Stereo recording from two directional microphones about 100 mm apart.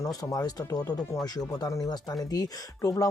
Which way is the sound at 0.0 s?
35° left (ahead or behind).